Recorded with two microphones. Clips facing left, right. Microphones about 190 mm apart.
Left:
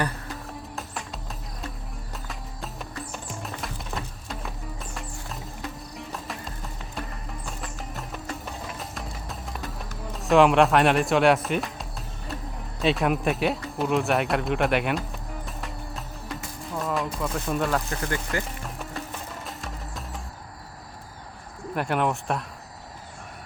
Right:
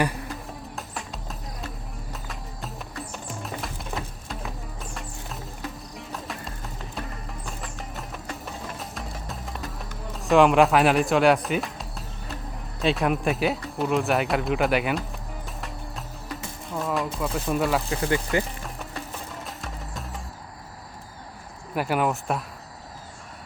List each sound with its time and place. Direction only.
0.8 s music: centre (ahead or behind)
2.2 s music: centre (ahead or behind)
10.2 s speech: centre (ahead or behind)
15.6 s music: centre (ahead or behind)
18.0 s speech: 20° right (ahead or behind)
19.5 s music: centre (ahead or behind)
21.8 s speech: 5° right (ahead or behind)